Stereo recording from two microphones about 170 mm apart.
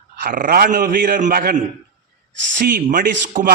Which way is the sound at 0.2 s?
55° right (ahead or behind).